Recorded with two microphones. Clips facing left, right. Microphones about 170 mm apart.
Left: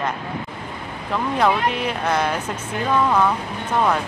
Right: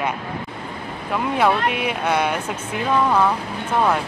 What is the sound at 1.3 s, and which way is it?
Speech, 5° right (ahead or behind).